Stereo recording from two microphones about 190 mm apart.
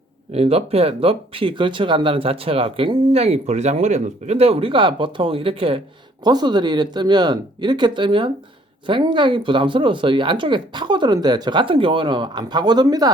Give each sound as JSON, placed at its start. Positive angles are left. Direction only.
{"t": 0.3, "sound": "speech", "side_deg": -30}